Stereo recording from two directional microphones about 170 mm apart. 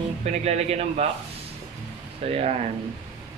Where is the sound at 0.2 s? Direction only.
40° right (ahead or behind).